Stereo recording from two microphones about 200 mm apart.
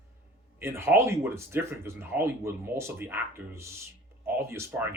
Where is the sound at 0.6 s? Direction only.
10° right (ahead or behind).